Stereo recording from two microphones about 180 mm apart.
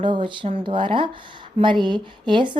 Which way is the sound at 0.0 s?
25° right (ahead or behind).